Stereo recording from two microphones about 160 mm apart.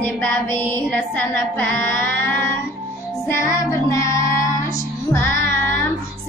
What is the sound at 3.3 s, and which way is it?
Music, 15° left (ahead or behind).